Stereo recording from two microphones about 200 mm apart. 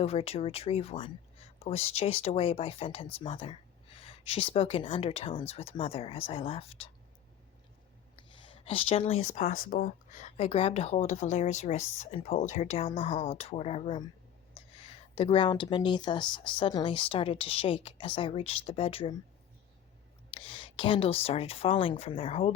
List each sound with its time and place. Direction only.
0.0 s speech: 30° left (ahead or behind)
8.4 s speech: 25° left (ahead or behind)
20.3 s speech: 25° left (ahead or behind)